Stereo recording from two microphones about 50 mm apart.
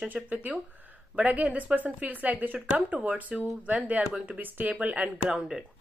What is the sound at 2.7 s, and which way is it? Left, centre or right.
A woman's voice, right.